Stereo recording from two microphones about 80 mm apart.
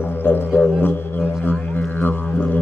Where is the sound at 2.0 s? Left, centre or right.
Left.